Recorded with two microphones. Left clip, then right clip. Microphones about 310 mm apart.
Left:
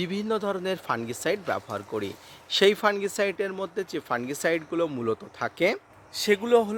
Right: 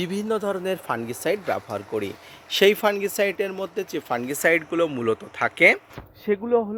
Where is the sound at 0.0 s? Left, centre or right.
Centre.